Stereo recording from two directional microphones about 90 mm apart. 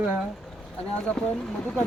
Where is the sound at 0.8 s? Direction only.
10° left (ahead or behind).